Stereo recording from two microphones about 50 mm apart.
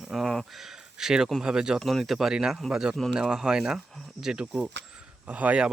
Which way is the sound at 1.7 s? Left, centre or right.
Centre.